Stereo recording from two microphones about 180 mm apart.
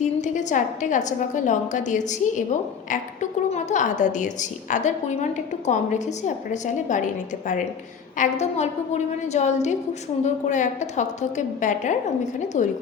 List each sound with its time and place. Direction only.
0.0 s a woman's voice: 40° left (ahead or behind)
8.2 s a woman's voice: 40° left (ahead or behind)